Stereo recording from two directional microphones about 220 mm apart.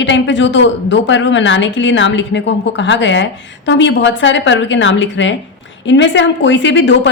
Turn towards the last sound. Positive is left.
turn(degrees=55)  # may be behind; listen again after turning